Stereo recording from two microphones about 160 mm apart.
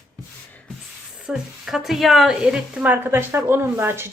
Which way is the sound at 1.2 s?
Centre (ahead or behind).